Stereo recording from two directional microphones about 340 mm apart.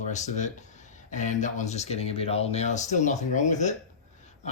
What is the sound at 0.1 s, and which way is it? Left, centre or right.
Speech, left.